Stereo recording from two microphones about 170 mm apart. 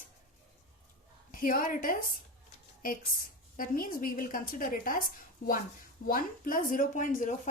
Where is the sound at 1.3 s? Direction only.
55° left (ahead or behind).